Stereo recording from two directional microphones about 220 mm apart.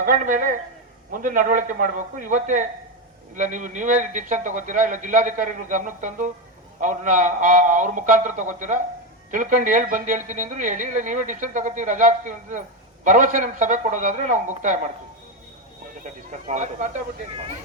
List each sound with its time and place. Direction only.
0.0 s speech: 35° right (ahead or behind)
16.5 s speech: 35° right (ahead or behind)